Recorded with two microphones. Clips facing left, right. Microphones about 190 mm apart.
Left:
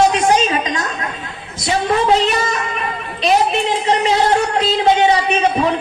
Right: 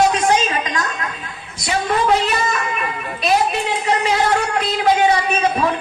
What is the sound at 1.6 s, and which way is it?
A woman's voice, 25° left (ahead or behind).